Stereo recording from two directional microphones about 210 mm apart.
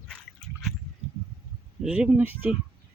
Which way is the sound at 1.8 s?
5° right (ahead or behind).